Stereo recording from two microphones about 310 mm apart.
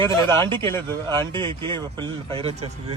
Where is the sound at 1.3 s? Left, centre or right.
Centre.